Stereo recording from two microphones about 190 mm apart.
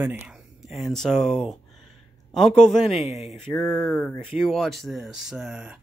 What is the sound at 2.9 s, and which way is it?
Speech, 35° left (ahead or behind).